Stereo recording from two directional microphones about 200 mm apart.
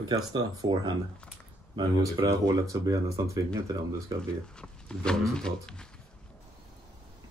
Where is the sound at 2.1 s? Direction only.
15° right (ahead or behind).